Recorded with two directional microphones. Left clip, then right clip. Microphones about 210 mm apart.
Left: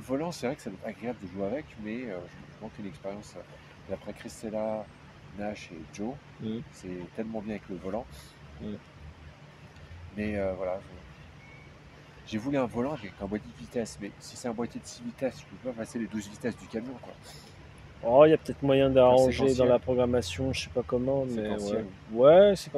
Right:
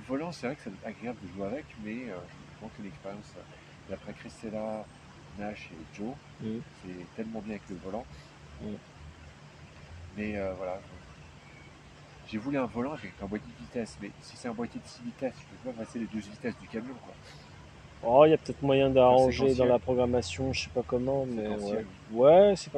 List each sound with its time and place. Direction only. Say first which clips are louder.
0.1 s speech: left 3 dB; 20° left (ahead or behind)
4.2 s speech: left 4 dB; 20° left (ahead or behind)
7.2 s speech: left 2 dB; 20° left (ahead or behind)
10.1 s speech: left 3 dB; 20° left (ahead or behind)
12.3 s speech: left 2 dB; 20° left (ahead or behind)
18.0 s speech: left 1 dB; centre (ahead or behind)
21.5 s speech: left 2 dB; 20° left (ahead or behind)
22.1 s speech: left 1 dB; centre (ahead or behind)